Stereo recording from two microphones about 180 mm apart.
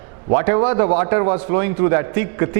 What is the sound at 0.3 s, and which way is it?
A man's voice, 20° right (ahead or behind).